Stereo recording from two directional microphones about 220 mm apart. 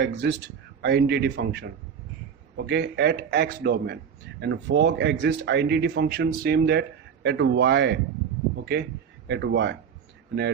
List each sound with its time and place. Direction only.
0.0 s a man's voice: 50° right (ahead or behind)
9.2 s a man's voice: 55° right (ahead or behind)